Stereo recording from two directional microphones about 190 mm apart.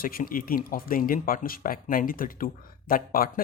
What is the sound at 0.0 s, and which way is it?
Speech, 50° left (ahead or behind).